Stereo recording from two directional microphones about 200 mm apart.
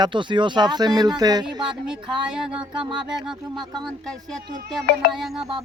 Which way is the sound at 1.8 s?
5° right (ahead or behind).